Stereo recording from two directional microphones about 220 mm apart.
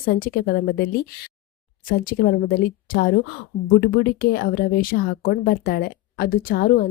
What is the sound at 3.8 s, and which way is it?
A woman's voice, 45° left (ahead or behind).